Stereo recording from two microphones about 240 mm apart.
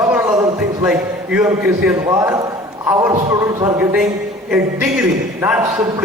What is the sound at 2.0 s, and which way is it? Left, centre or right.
A man's voice, centre.